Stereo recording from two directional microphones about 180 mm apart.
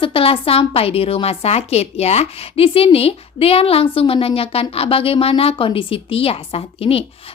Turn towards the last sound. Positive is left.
turn(degrees=35)  # may be behind; listen again after turning